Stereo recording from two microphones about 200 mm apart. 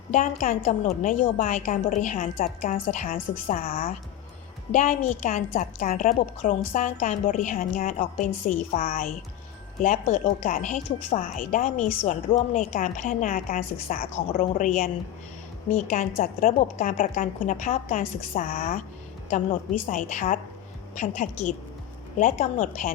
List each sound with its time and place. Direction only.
0.1 s a woman's voice: 40° left (ahead or behind)